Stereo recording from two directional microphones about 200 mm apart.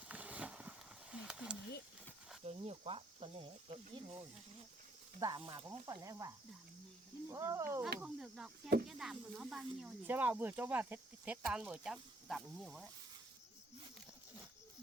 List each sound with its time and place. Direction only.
0.1 s vehicle: 5° right (ahead or behind)
1.1 s a sound: 5° right (ahead or behind)
2.4 s speech: 30° right (ahead or behind)
5.4 s speech: 30° right (ahead or behind)
5.8 s speech: 15° right (ahead or behind)
8.0 s speech: 5° right (ahead or behind)